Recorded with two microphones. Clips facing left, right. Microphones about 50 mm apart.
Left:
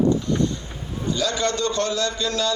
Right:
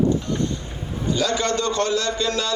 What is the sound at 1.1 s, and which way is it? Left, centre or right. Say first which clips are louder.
Music: right 2 dB; right.